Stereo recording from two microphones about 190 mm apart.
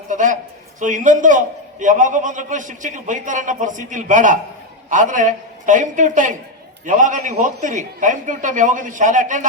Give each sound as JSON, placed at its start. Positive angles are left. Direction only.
{"t": 0.1, "sound": "a man's voice", "side_deg": -40}